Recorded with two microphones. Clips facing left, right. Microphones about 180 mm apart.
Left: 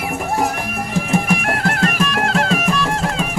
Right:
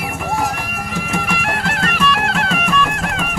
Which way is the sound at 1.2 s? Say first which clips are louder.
Left 3 dB; 45° left (ahead or behind).